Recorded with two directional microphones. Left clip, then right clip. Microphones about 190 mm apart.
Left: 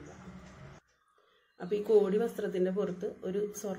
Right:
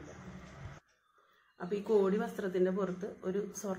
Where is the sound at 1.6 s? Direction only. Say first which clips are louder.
Left 4 dB; 20° left (ahead or behind).